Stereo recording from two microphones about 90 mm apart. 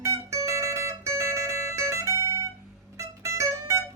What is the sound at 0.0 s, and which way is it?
Music, 35° right (ahead or behind).